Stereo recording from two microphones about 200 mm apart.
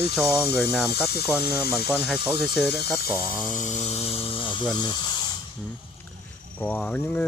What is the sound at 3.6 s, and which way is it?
Speech, 30° left (ahead or behind).